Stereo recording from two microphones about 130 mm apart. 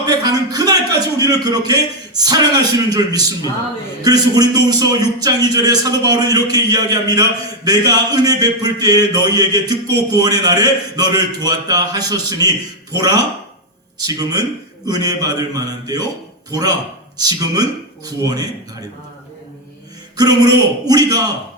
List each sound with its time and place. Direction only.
0.0 s a man's voice: 30° right (ahead or behind)
14.2 s a man's voice: 30° right (ahead or behind)
20.1 s a man's voice: 30° right (ahead or behind)